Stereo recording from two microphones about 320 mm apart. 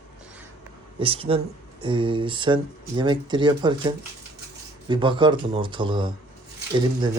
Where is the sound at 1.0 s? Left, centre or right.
Centre.